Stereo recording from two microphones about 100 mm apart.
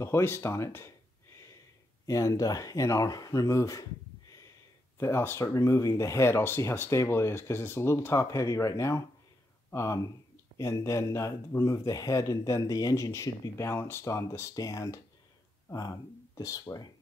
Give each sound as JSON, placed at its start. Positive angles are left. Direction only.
{"t": 0.0, "sound": "speech", "side_deg": 25}
{"t": 2.0, "sound": "speech", "side_deg": 35}
{"t": 4.9, "sound": "speech", "side_deg": 25}